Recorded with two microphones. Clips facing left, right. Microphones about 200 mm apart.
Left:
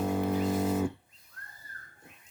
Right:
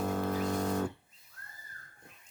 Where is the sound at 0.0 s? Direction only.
10° left (ahead or behind).